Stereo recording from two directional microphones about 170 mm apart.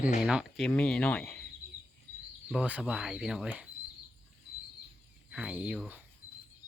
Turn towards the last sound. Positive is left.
turn(degrees=-10)  # may be behind; listen again after turning